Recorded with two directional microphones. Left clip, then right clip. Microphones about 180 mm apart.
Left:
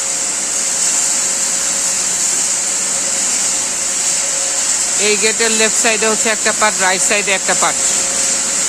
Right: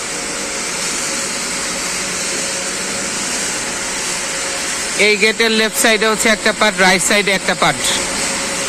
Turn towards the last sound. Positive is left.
turn(degrees=-25)  # may be behind; listen again after turning